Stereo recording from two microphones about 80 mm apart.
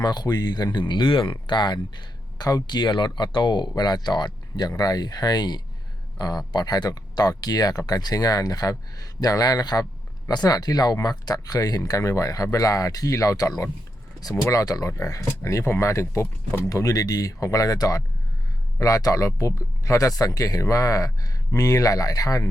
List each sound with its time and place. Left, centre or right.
0.0 s speech: left
16.2 s speech: left
16.6 s speech: left